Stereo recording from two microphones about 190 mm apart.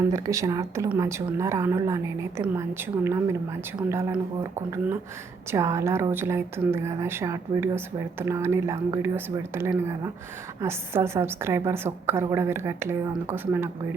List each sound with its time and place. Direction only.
0.1 s a woman's voice: 15° right (ahead or behind)
5.5 s a woman's voice: 15° right (ahead or behind)